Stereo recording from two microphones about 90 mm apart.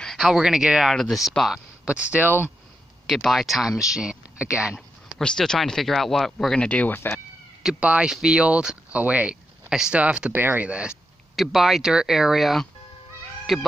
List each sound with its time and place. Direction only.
0.0 s speech: centre (ahead or behind)
1.9 s speech: 15° right (ahead or behind)
3.1 s speech: centre (ahead or behind)
4.7 s speech: 10° left (ahead or behind)
7.6 s speech: 10° right (ahead or behind)